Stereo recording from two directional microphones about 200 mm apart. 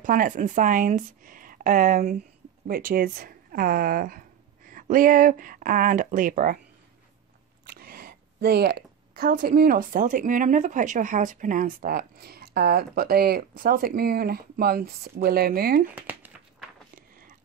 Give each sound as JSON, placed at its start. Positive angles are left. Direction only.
{"t": 0.0, "sound": "speech", "side_deg": -40}
{"t": 7.6, "sound": "speech", "side_deg": -50}
{"t": 15.9, "sound": "a sound", "side_deg": -10}